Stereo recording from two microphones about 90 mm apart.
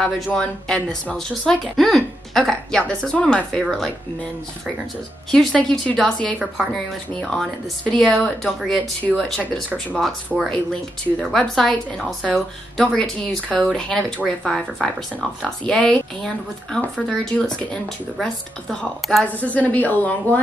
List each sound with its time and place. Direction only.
0.0 s a woman's voice: 10° left (ahead or behind)
5.3 s a woman's voice: 5° left (ahead or behind)
19.2 s a woman's voice: 15° left (ahead or behind)